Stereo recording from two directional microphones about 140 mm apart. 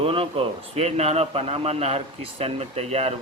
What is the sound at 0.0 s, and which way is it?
Speech, 40° right (ahead or behind).